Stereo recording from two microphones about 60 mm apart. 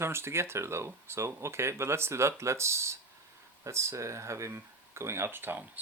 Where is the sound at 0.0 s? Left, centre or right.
Right.